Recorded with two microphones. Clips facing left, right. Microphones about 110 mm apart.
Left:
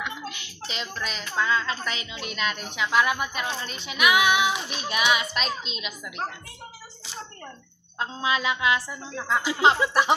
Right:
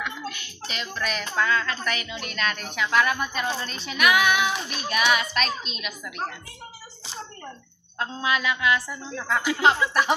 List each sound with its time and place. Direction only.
0.0 s a sound: 25° left (ahead or behind)
0.9 s child singing: 20° left (ahead or behind)
8.0 s speech: 25° left (ahead or behind)